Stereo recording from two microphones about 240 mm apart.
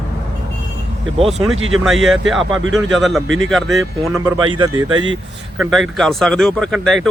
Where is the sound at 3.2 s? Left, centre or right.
Right.